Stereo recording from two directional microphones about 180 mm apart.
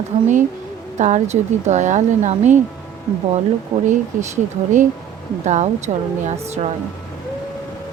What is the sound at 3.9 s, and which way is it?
A woman's voice, 45° right (ahead or behind).